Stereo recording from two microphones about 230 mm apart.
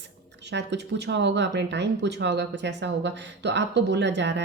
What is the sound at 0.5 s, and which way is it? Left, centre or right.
Speech, right.